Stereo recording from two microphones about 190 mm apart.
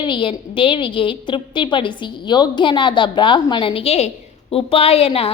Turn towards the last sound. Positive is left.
turn(degrees=30)  # may be behind; listen again after turning